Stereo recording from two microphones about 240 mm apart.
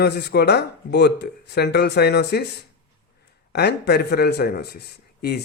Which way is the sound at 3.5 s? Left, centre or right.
Left.